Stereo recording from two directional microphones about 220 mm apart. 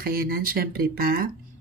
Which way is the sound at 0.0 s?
45° right (ahead or behind).